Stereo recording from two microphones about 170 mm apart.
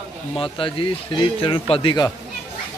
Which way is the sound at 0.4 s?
30° left (ahead or behind).